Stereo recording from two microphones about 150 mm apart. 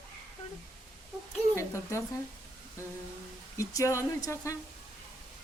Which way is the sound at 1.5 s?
20° left (ahead or behind).